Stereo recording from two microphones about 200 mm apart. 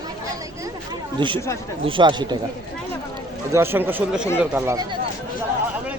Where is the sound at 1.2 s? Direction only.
25° right (ahead or behind).